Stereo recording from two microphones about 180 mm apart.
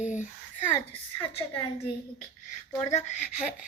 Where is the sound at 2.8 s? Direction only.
40° left (ahead or behind).